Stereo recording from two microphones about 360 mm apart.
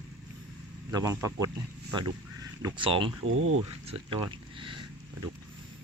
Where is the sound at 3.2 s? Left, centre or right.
Right.